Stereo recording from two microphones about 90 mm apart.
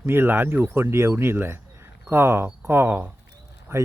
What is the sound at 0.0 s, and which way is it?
Speech, 25° right (ahead or behind).